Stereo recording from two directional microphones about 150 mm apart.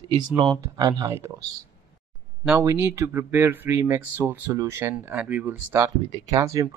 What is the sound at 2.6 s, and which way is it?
Speech, 20° right (ahead or behind).